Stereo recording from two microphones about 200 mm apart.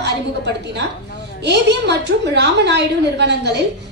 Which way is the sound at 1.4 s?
60° right (ahead or behind).